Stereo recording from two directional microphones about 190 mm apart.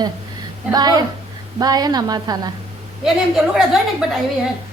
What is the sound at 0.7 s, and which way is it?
A woman's voice, 20° right (ahead or behind).